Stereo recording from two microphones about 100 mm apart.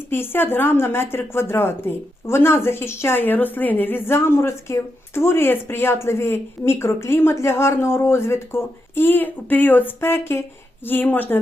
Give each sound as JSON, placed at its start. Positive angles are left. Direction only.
{"t": 0.1, "sound": "a woman's voice", "side_deg": 20}